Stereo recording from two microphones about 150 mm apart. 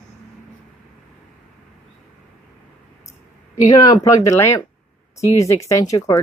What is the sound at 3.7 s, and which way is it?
Speech, 25° left (ahead or behind).